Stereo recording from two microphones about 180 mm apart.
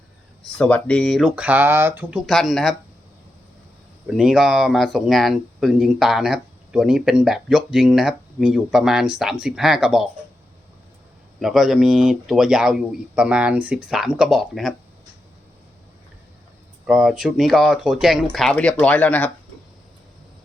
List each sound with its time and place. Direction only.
0.6 s speech: 5° left (ahead or behind)
4.0 s speech: centre (ahead or behind)
11.3 s speech: centre (ahead or behind)
16.8 s speech: 5° right (ahead or behind)